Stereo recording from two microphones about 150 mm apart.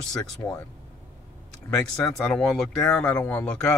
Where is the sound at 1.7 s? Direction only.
5° left (ahead or behind).